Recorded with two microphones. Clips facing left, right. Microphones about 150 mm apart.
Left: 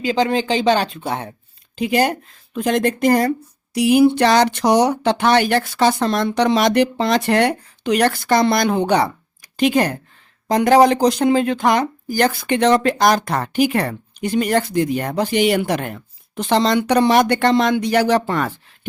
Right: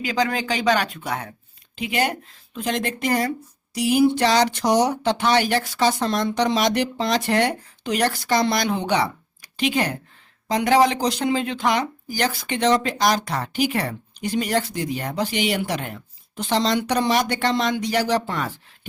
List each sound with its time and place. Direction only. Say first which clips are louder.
0.0 s speech: left 5 dB; 25° left (ahead or behind)
1.7 s speech: left 6 dB; 40° left (ahead or behind)
2.6 s speech: left 7 dB; 50° left (ahead or behind)
3.8 s speech: left 5 dB; 60° left (ahead or behind)